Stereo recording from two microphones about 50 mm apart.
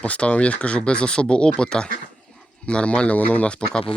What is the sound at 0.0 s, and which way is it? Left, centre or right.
Speech, left.